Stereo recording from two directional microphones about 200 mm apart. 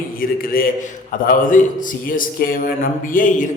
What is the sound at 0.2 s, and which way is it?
A man's voice, 45° left (ahead or behind).